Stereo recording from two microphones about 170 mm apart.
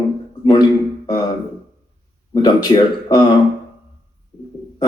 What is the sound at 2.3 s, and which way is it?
Speech, 25° left (ahead or behind).